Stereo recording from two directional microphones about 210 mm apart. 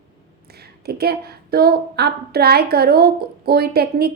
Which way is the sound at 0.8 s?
50° right (ahead or behind).